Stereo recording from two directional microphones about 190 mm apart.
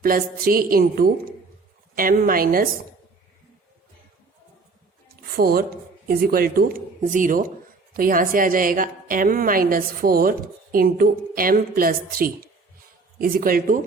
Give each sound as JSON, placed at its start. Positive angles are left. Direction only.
{"t": 0.0, "sound": "a woman's voice", "side_deg": -50}
{"t": 5.0, "sound": "a woman's voice", "side_deg": -50}